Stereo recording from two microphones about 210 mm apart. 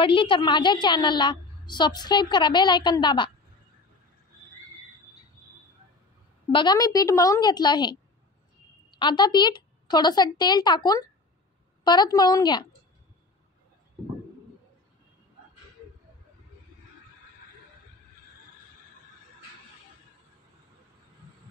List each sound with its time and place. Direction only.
0.0 s a woman's voice: 25° left (ahead or behind)
6.5 s a woman's voice: 20° left (ahead or behind)